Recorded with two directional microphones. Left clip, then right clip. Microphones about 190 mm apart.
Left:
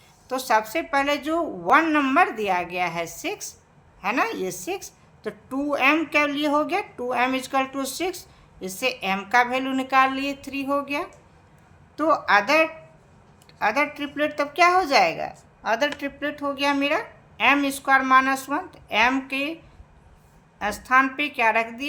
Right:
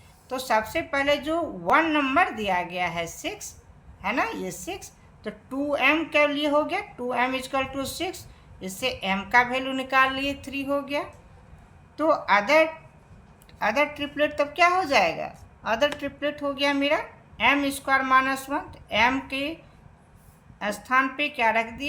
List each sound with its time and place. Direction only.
0.3 s a woman's voice: 20° left (ahead or behind)
20.6 s a woman's voice: 20° left (ahead or behind)